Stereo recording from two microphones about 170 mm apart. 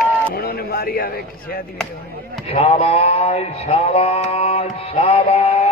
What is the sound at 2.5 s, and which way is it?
Male singing, 35° left (ahead or behind).